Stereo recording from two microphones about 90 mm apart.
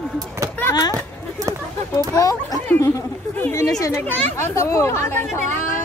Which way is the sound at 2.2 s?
40° left (ahead or behind).